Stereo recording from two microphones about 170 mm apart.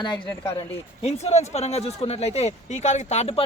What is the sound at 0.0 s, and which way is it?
Speech, 25° left (ahead or behind).